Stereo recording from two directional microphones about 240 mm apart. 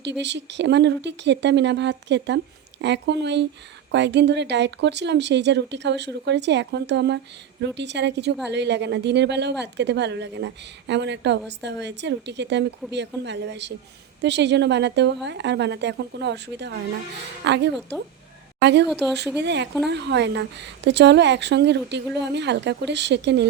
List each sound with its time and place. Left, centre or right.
0.0 s a woman's voice: right